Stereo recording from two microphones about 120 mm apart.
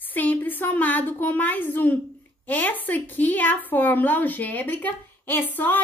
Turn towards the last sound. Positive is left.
turn(degrees=15)  # may be behind; listen again after turning